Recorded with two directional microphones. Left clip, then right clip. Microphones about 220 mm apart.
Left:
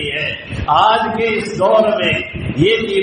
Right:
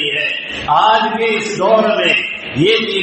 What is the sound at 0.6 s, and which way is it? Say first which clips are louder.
Mantra: right 1 dB; 30° left (ahead or behind).